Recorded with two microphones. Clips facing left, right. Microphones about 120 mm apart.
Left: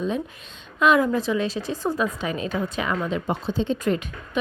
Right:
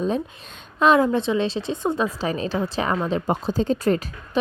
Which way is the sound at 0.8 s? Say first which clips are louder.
Right 2 dB; 30° right (ahead or behind).